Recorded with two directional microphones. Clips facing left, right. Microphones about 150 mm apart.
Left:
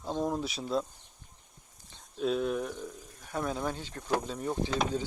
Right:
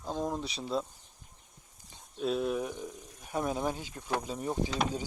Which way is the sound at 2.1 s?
Centre (ahead or behind).